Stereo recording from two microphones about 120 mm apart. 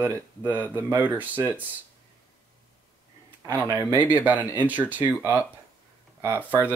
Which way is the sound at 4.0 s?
15° right (ahead or behind).